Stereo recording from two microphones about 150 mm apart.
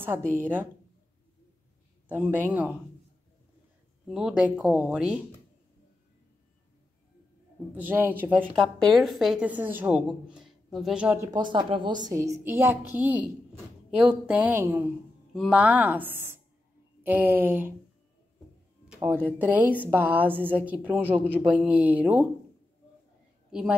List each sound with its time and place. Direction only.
0.4 s a woman's voice: 10° right (ahead or behind)
2.0 s a woman's voice: 15° right (ahead or behind)
4.1 s a woman's voice: 5° right (ahead or behind)
7.7 s a woman's voice: 10° right (ahead or behind)
8.5 s a woman's voice: centre (ahead or behind)
11.1 s a woman's voice: 30° right (ahead or behind); by 17.7 s 15° right (ahead or behind)
19.2 s a woman's voice: 10° right (ahead or behind)